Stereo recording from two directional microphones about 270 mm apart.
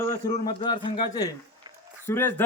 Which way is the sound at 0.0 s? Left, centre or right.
Centre.